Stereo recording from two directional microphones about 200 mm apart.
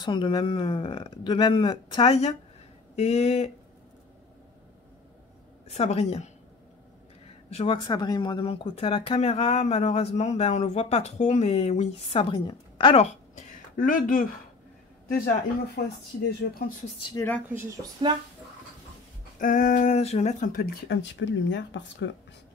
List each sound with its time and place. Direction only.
0.0 s speech: 25° left (ahead or behind)
5.7 s speech: 30° left (ahead or behind)
7.4 s speech: 30° left (ahead or behind)
13.7 s speech: 45° left (ahead or behind)
15.8 s speech: 50° left (ahead or behind)
17.1 s speech: 10° left (ahead or behind)
18.0 s speech: 25° right (ahead or behind)
19.3 s speech: 40° left (ahead or behind)
20.9 s speech: 60° left (ahead or behind)